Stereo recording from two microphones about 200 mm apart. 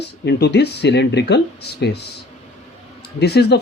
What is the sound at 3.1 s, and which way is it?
Speech, 55° left (ahead or behind).